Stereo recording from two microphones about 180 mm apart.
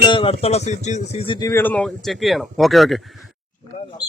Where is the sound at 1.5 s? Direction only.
10° left (ahead or behind).